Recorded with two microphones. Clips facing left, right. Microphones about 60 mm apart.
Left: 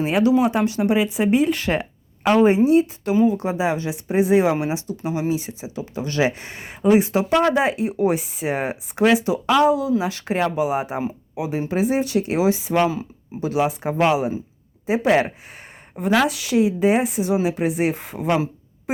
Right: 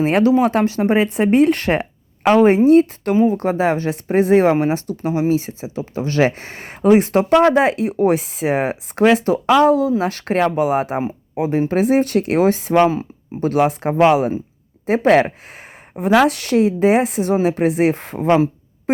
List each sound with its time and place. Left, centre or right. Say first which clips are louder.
0.0 s speech: right 4 dB; right
0.3 s speech: right 3 dB; right
1.3 s speech: right 6 dB; right
5.0 s speech: right 6 dB; right
7.0 s speech: right 5 dB; right
9.6 s speech: right 2 dB; right
11.3 s speech: right 7 dB; right
11.7 s speech: right 3 dB; right
12.7 s speech: right 5 dB; right
15.5 s a sound: right 4 dB; right
16.2 s speech: right 4 dB; right